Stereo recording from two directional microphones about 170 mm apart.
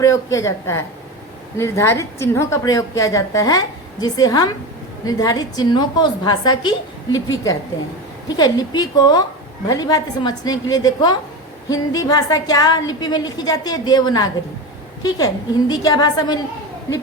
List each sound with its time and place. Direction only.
0.0 s a woman's voice: 20° left (ahead or behind)